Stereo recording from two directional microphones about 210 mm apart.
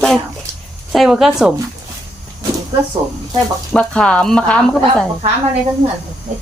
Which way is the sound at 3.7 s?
5° left (ahead or behind).